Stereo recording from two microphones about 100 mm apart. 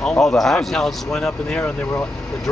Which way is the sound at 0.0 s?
10° left (ahead or behind).